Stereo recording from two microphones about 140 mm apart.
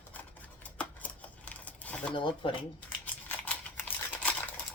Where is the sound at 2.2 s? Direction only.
35° left (ahead or behind).